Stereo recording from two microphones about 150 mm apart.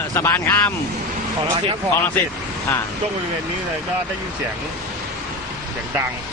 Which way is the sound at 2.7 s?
15° left (ahead or behind).